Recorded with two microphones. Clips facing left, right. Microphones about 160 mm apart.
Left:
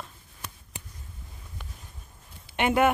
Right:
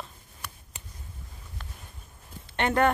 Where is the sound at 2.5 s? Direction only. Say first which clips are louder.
Left 1 dB; 10° left (ahead or behind).